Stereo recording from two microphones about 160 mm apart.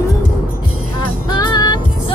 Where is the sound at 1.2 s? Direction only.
25° left (ahead or behind).